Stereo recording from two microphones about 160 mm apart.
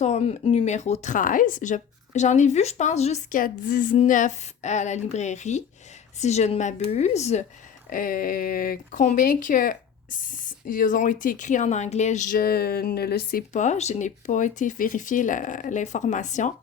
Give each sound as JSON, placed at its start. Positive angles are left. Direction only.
{"t": 0.0, "sound": "speech", "side_deg": 40}
{"t": 7.9, "sound": "speech", "side_deg": 60}
{"t": 12.4, "sound": "a sound", "side_deg": 70}
{"t": 13.5, "sound": "speech", "side_deg": 50}